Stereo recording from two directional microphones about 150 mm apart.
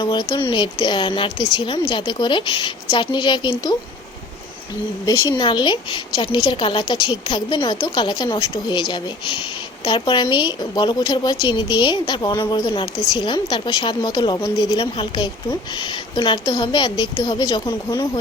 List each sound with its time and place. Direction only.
0.0 s a woman's voice: 30° left (ahead or behind)
5.0 s a woman's voice: 30° left (ahead or behind)